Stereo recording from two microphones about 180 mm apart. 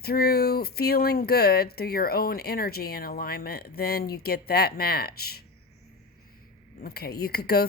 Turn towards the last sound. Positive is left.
turn(degrees=60)  # may be behind; listen again after turning